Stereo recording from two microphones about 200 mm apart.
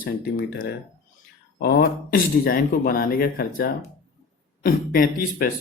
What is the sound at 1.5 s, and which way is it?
A man's voice, 50° left (ahead or behind).